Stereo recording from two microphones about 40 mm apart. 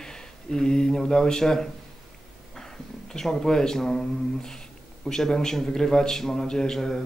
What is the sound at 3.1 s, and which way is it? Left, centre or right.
Speech, centre.